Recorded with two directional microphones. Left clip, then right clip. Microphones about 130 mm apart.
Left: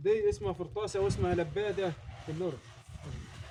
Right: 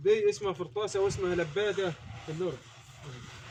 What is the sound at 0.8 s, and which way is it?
Speech, 35° left (ahead or behind).